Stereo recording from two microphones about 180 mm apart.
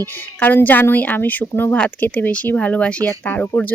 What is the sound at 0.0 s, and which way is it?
Speech, 10° left (ahead or behind).